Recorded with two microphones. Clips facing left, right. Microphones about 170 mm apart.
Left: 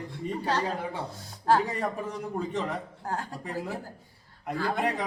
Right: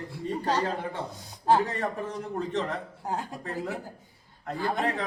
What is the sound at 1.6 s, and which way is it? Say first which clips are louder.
A man's voice: even; 10° left (ahead or behind).